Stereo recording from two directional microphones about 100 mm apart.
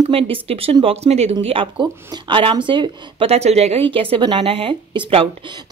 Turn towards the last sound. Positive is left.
turn(degrees=-65)  # may be behind; listen again after turning